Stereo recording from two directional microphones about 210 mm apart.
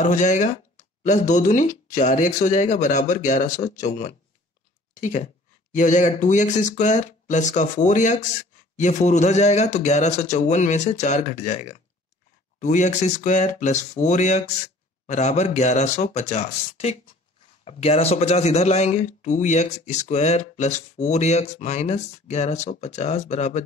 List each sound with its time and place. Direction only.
0.0 s speech: 35° left (ahead or behind)